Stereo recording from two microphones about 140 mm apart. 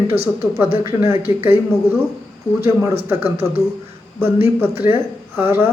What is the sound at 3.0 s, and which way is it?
Speech, 15° right (ahead or behind).